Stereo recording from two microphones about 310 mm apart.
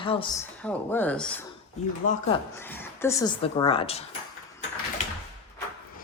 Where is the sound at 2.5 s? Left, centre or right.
Centre.